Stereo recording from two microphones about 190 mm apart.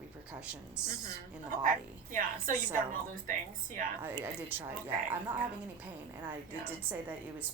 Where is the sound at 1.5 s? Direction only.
45° right (ahead or behind).